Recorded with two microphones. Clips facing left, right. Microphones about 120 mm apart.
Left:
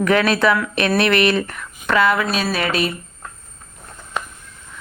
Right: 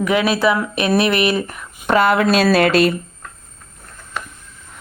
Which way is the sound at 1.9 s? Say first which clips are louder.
Right 3 dB; 50° right (ahead or behind).